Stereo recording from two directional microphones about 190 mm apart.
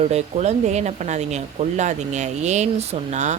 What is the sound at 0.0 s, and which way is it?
Speech, 35° right (ahead or behind).